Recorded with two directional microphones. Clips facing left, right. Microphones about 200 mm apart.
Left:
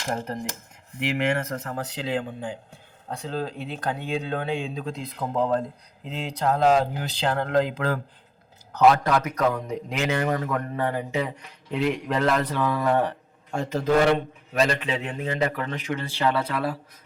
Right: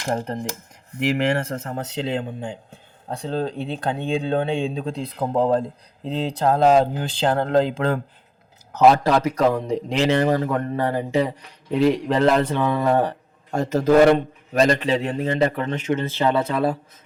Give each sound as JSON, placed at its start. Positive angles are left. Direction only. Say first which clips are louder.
{"t": 0.3, "sound": "a man's voice", "louder": "right 3 dB", "side_deg": -30}
{"t": 0.9, "sound": "a man's voice", "louder": "right 4 dB", "side_deg": -40}